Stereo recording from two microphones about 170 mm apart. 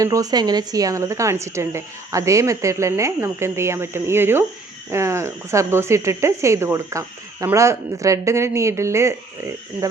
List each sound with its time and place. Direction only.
0.0 s speech: 20° right (ahead or behind)